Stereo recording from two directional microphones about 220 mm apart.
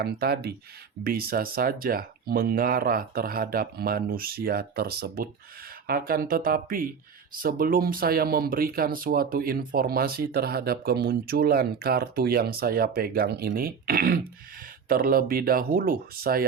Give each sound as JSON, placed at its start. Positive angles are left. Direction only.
{"t": 0.0, "sound": "speech", "side_deg": -45}